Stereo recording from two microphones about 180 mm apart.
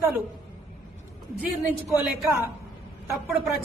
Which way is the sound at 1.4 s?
5° right (ahead or behind).